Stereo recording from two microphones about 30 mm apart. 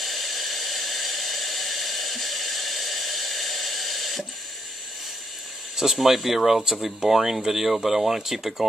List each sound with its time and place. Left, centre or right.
0.0 s hair dryer: centre
5.9 s speech: centre